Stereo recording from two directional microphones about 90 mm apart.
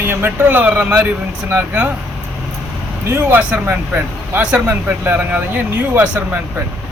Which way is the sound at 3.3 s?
15° right (ahead or behind).